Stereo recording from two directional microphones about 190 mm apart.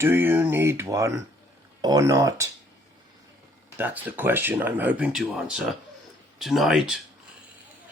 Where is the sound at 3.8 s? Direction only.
10° right (ahead or behind).